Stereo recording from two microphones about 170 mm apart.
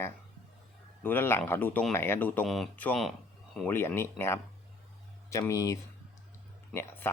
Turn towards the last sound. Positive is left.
turn(degrees=15)  # may be behind; listen again after turning